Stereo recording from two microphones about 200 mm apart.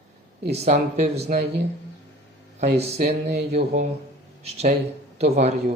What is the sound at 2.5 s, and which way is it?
Speech, 30° right (ahead or behind).